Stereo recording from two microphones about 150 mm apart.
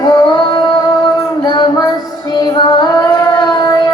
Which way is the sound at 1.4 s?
30° left (ahead or behind).